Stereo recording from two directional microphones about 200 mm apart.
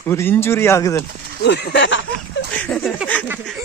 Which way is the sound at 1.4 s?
60° left (ahead or behind).